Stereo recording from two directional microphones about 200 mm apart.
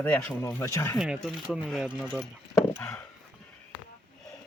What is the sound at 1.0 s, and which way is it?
Speech, centre (ahead or behind).